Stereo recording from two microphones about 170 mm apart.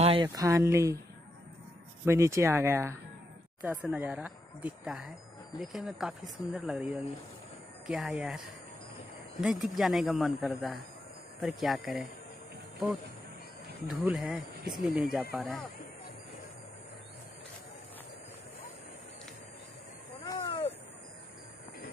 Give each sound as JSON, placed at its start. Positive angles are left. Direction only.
{"t": 0.0, "sound": "a sound", "side_deg": -35}
{"t": 0.3, "sound": "speech", "side_deg": -20}
{"t": 2.0, "sound": "speech", "side_deg": -15}
{"t": 9.4, "sound": "speech", "side_deg": 0}
{"t": 13.8, "sound": "speech", "side_deg": -5}
{"t": 20.2, "sound": "a sound", "side_deg": 20}